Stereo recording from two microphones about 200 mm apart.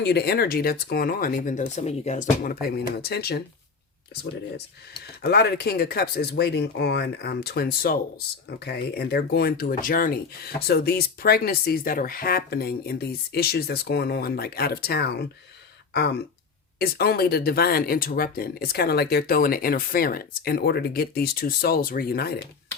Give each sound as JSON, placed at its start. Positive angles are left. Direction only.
{"t": 0.0, "sound": "speech", "side_deg": 55}
{"t": 5.2, "sound": "speech", "side_deg": 55}